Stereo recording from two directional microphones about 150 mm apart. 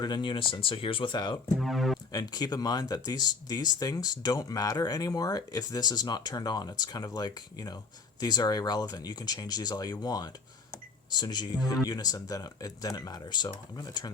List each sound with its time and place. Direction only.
0.0 s speech: 30° left (ahead or behind)
1.6 s speech: centre (ahead or behind)
2.1 s speech: 25° left (ahead or behind)